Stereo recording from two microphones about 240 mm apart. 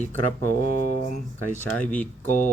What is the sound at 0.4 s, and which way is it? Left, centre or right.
Speech, left.